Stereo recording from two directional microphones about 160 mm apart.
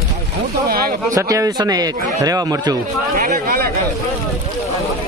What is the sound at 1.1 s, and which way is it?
Speech, 20° right (ahead or behind).